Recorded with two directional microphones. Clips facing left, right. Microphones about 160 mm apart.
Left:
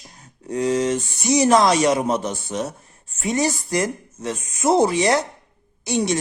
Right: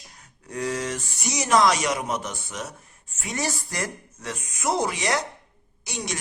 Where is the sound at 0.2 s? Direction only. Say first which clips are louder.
Left 7 dB; 25° left (ahead or behind).